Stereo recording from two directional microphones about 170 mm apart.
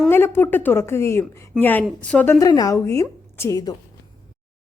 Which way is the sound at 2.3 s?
20° left (ahead or behind).